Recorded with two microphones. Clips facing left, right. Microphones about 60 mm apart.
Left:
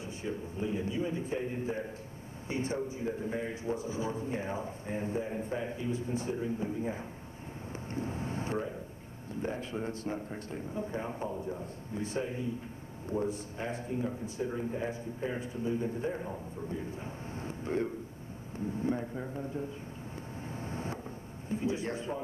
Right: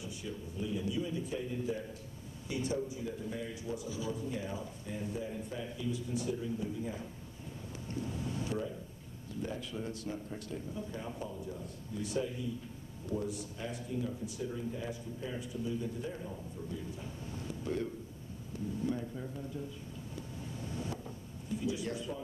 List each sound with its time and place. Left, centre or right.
0.0 s a man's voice: left
7.7 s vehicle: left
9.3 s a man's voice: left
20.4 s vehicle: left
21.5 s a man's voice: left